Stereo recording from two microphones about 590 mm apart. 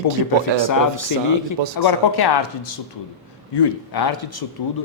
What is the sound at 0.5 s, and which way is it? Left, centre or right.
A man's voice, left.